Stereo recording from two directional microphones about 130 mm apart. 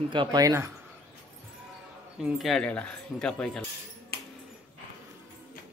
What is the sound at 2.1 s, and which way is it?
Speech, centre (ahead or behind).